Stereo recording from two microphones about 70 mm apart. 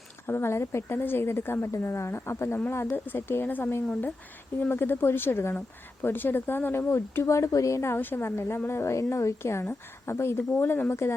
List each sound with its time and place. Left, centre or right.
0.3 s speech: left